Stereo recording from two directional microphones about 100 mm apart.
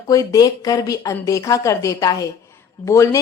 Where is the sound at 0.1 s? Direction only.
35° left (ahead or behind).